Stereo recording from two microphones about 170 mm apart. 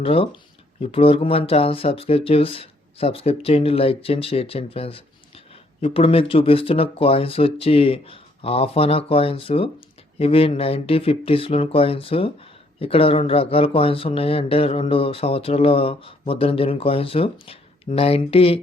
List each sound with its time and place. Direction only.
0.0 s speech: 35° left (ahead or behind)